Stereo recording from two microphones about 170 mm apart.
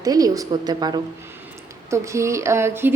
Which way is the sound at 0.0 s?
20° right (ahead or behind).